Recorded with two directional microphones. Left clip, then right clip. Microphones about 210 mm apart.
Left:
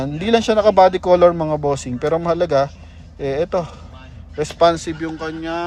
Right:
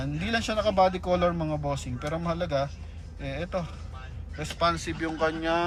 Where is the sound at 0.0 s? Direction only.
45° left (ahead or behind).